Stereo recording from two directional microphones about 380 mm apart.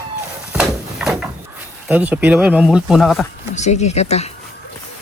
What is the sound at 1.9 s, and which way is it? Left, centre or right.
Speech, centre.